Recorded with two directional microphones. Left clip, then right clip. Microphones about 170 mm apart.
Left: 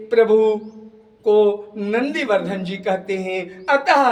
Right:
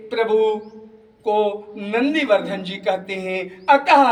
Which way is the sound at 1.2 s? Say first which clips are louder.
Left 4 dB; 40° left (ahead or behind).